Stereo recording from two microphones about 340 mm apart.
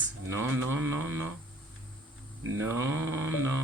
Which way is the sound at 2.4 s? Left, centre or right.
Right.